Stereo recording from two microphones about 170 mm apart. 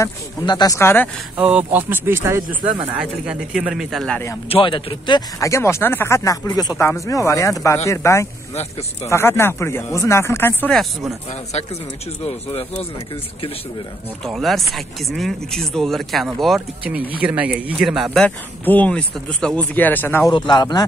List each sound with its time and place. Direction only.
0.0 s speech: 20° left (ahead or behind)
1.3 s speech: 10° right (ahead or behind)
4.5 s speech: 30° left (ahead or behind); by 10.7 s 15° left (ahead or behind)
10.7 s speech: centre (ahead or behind)
14.2 s speech: centre (ahead or behind)
20.2 s speech: 25° left (ahead or behind)